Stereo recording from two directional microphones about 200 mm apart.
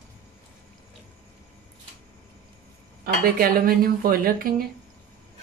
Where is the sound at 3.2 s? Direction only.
50° right (ahead or behind).